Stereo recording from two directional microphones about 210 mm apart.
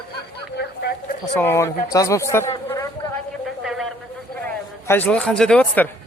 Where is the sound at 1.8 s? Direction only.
15° left (ahead or behind).